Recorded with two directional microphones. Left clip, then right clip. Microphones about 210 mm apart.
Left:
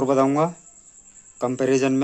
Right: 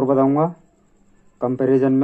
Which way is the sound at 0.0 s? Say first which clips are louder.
Right 2 dB; 20° left (ahead or behind).